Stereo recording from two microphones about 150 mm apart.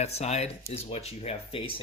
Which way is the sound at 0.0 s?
45° left (ahead or behind).